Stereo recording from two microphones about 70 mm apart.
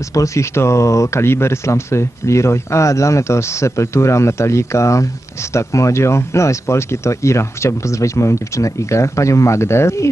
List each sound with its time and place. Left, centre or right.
0.1 s speech: left